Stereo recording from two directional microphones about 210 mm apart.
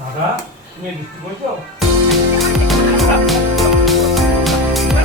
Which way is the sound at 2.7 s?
Centre (ahead or behind).